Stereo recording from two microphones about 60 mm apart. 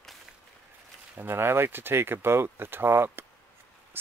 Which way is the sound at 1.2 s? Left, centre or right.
Right.